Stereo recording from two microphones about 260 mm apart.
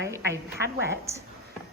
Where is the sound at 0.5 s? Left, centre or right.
Right.